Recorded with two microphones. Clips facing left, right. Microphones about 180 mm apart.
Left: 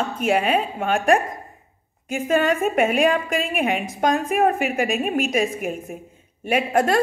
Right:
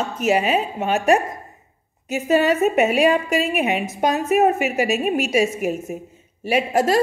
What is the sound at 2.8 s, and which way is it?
Speech, 50° left (ahead or behind).